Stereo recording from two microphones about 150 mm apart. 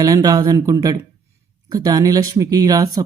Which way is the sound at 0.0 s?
25° right (ahead or behind).